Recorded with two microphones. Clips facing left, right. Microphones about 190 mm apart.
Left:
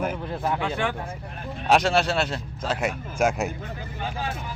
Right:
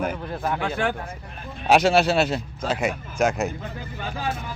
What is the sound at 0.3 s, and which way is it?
Speech, 25° left (ahead or behind).